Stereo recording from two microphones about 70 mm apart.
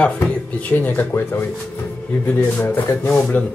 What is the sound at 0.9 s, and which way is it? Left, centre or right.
Speech, left.